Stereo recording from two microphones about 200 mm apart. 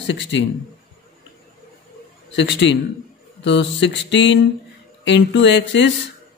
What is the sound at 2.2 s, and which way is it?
A man's voice, 60° left (ahead or behind).